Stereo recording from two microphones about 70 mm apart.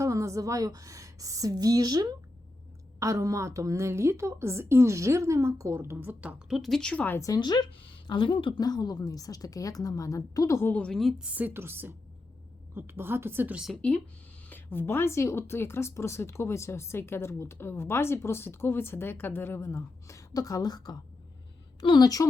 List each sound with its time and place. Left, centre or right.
0.0 s a woman's voice: right
3.0 s a woman's voice: right
6.5 s speech: centre
6.9 s a woman's voice: left
7.3 s a woman's voice: left
10.6 s a woman's voice: left
10.8 s speech: centre
11.2 s a woman's voice: right
11.5 s a woman's voice: right
13.7 s speech: centre
14.5 s speech: left
20.3 s a woman's voice: left